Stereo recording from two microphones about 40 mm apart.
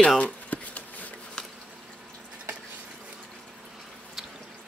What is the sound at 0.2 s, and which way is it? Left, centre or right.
Shuffling cards, left.